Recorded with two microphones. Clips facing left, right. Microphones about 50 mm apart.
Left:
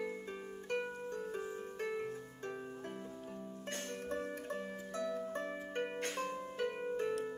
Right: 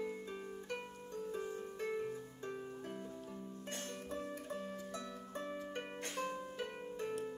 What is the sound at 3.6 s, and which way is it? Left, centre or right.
Music, left.